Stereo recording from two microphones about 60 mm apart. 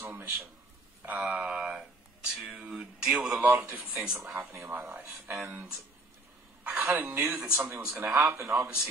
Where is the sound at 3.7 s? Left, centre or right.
Right.